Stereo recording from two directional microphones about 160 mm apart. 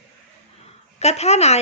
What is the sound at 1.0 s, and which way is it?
Speech, 45° left (ahead or behind).